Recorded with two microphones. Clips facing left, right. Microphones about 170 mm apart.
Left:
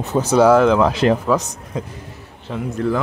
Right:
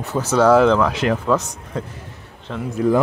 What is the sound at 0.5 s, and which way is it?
Speech, centre (ahead or behind).